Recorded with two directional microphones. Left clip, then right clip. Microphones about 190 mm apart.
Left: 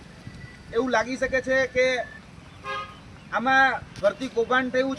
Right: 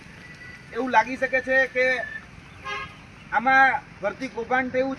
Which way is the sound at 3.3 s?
15° left (ahead or behind).